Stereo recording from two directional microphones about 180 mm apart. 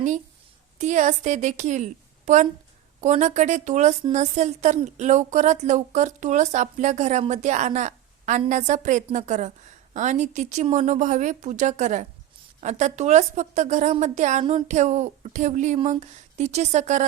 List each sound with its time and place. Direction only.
0.8 s a woman's voice: 40° right (ahead or behind)